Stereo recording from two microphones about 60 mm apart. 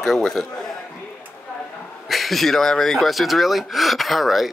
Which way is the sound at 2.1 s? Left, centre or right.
Centre.